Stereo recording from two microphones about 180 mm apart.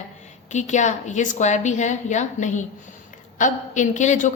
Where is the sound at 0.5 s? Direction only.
40° left (ahead or behind).